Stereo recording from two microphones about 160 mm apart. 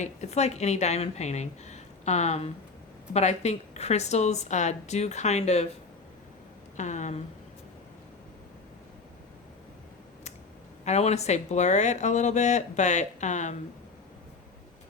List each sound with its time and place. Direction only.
0.0 s speech: 45° left (ahead or behind)
6.7 s speech: 50° left (ahead or behind)
10.8 s speech: 45° left (ahead or behind)